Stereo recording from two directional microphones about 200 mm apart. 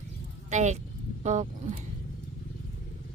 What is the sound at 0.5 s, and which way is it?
Speech, 35° right (ahead or behind).